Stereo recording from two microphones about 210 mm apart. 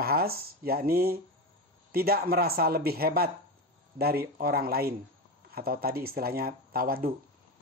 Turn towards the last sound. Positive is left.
turn(degrees=-45)  # may be behind; listen again after turning